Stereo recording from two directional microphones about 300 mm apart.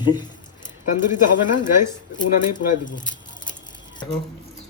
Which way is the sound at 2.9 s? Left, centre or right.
Centre.